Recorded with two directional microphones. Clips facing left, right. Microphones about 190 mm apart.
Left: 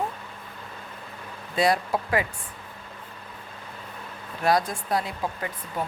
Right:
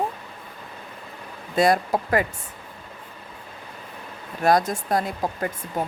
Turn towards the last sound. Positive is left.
turn(degrees=-45)  # may be behind; listen again after turning